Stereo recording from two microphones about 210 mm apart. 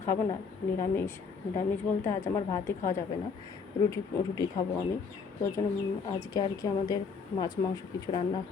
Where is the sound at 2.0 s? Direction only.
10° left (ahead or behind).